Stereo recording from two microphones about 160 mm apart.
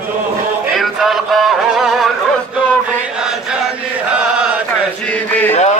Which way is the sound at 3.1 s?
5° right (ahead or behind).